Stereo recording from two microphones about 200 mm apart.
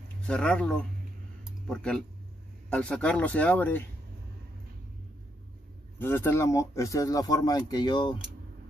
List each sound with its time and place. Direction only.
0.3 s speech: 5° left (ahead or behind)
1.4 s a sound: 5° left (ahead or behind)
2.7 s speech: 5° left (ahead or behind)
5.9 s speech: 10° left (ahead or behind)